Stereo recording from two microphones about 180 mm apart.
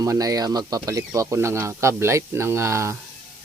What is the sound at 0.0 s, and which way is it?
Speech, 20° right (ahead or behind).